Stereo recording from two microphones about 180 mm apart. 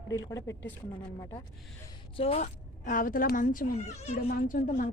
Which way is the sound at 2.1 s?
35° left (ahead or behind).